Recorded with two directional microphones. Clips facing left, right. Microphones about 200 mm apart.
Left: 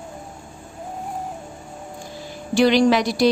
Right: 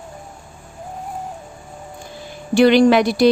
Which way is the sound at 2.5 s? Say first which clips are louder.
Right 4 dB; 60° right (ahead or behind).